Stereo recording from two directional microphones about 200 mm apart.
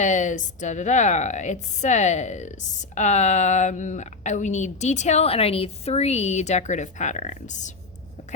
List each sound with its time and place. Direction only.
0.0 s a woman's voice: 35° left (ahead or behind)